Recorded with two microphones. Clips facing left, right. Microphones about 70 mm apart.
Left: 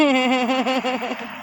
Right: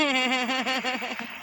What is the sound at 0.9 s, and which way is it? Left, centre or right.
Speech, left.